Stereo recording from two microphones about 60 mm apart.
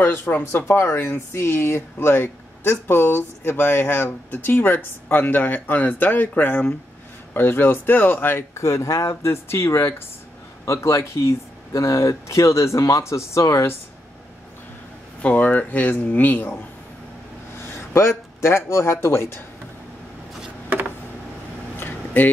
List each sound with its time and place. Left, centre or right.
0.0 s speech: left
8.5 s speech: left
10.6 s speech: left
15.2 s speech: left
17.6 s speech: left
21.7 s vehicle: left